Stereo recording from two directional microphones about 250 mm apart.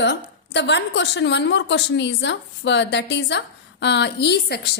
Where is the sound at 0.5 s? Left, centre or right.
Left.